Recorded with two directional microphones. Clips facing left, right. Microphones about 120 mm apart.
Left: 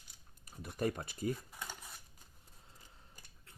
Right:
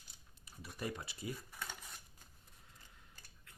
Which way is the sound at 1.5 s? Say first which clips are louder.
Left 1 dB; 15° left (ahead or behind).